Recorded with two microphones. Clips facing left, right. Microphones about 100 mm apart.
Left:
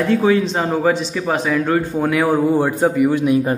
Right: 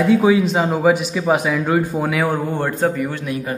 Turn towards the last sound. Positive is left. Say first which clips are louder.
# left 5 dB
turn(degrees=15)  # may be behind; listen again after turning